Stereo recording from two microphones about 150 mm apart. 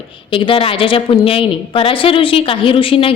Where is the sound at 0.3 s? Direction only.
35° left (ahead or behind).